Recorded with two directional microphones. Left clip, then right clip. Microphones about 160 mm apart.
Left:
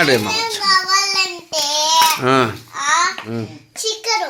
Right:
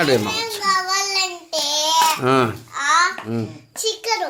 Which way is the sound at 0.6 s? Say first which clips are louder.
Left 4 dB; 30° left (ahead or behind).